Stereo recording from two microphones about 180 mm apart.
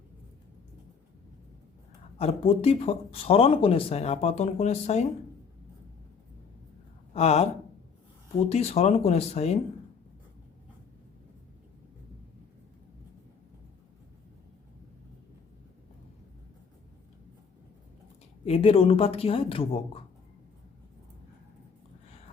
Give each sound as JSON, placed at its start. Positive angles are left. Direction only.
{"t": 2.1, "sound": "speech", "side_deg": 35}
{"t": 7.1, "sound": "speech", "side_deg": 35}
{"t": 8.4, "sound": "speech", "side_deg": 35}
{"t": 18.4, "sound": "speech", "side_deg": 30}